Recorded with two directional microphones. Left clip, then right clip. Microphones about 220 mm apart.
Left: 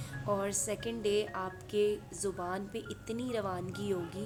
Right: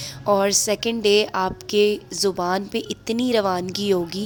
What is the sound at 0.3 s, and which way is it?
A woman's voice, 45° right (ahead or behind).